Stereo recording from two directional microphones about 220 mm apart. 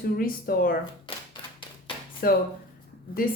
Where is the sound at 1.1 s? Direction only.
25° left (ahead or behind).